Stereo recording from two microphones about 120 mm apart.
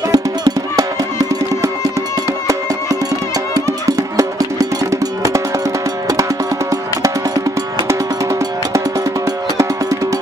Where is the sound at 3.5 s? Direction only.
25° right (ahead or behind).